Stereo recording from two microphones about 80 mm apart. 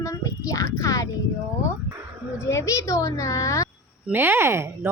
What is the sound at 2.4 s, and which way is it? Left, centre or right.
A child's voice, left.